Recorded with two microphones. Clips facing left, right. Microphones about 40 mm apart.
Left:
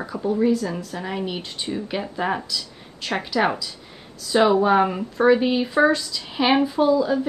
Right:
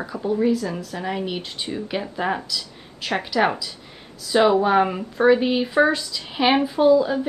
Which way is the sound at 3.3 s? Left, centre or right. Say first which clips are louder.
Right 1 dB; right.